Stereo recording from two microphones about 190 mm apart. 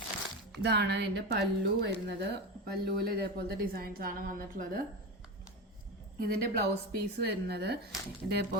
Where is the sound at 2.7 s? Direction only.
55° right (ahead or behind).